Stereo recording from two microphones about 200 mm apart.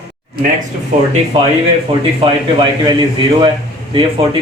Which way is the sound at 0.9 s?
40° right (ahead or behind).